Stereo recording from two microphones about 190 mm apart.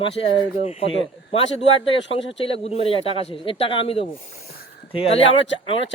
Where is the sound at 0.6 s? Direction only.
30° left (ahead or behind).